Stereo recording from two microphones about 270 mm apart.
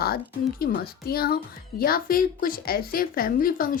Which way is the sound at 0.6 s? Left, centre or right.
Left.